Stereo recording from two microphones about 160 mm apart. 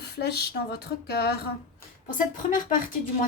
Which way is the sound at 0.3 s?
90° left.